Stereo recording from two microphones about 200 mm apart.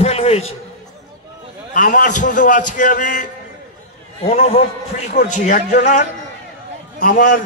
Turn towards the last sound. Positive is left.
turn(degrees=45)  # may be behind; listen again after turning